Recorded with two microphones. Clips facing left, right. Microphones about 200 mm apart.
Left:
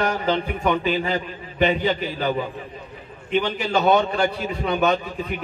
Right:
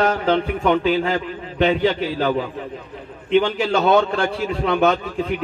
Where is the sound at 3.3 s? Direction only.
90° right.